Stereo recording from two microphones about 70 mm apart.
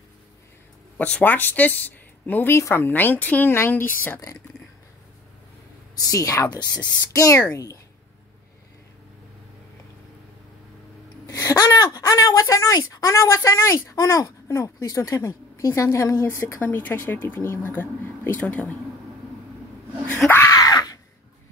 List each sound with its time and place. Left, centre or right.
0.9 s speech: centre
2.5 s a woman's voice: left
6.0 s speech: left
6.5 s speech: left
7.2 s speech: left
11.2 s a sound: left
12.3 s a woman's voice: left
16.6 s speech: left
20.5 s screaming: left